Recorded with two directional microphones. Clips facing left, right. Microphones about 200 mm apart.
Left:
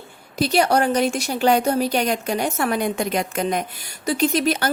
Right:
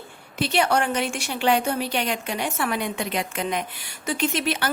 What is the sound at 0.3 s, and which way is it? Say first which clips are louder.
A woman's voice: left 4 dB; 40° left (ahead or behind).